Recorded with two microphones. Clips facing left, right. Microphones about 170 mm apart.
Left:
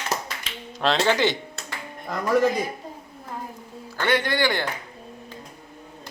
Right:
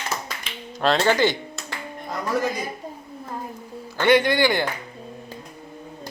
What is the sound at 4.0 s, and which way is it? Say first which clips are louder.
Speech: right 5 dB; 15° right (ahead or behind).